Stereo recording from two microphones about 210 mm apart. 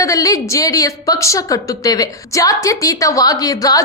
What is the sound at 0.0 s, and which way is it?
A woman's voice, 15° left (ahead or behind).